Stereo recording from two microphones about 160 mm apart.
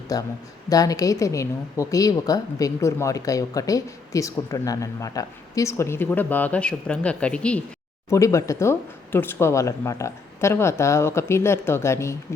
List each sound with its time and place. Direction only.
0.1 s a woman's voice: 25° left (ahead or behind); by 7.6 s 5° left (ahead or behind)
8.1 s speech: 20° left (ahead or behind)